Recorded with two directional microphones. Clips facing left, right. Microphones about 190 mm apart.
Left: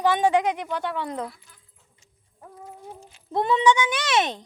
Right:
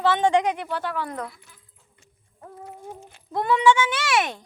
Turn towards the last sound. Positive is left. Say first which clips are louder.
# left 1 dB
turn(degrees=20)  # may be behind; listen again after turning